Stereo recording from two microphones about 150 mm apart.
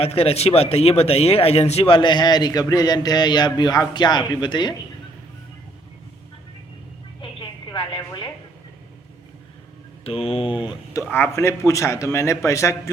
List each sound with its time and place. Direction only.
0.0 s speech: 40° left (ahead or behind)
7.2 s music: 35° left (ahead or behind)
10.0 s speech: 40° left (ahead or behind)
11.1 s a man's voice: 15° left (ahead or behind)